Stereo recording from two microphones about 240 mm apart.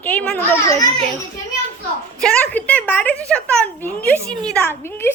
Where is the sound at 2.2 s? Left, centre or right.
Centre.